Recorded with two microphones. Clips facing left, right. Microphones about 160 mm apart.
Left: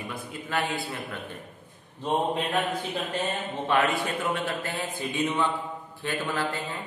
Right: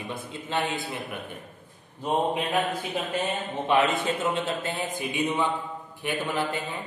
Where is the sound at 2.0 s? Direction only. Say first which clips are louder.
Right 1 dB; 15° right (ahead or behind).